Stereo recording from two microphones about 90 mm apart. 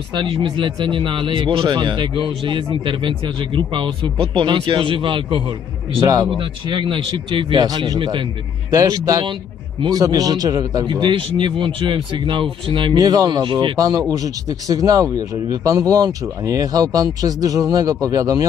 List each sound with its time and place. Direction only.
0.1 s speech: 65° right (ahead or behind)
7.5 s speech: 45° right (ahead or behind)
8.0 s speech: 65° right (ahead or behind)
8.6 s speech: 40° right (ahead or behind)
10.9 s speech: 60° right (ahead or behind)
12.9 s speech: 45° right (ahead or behind)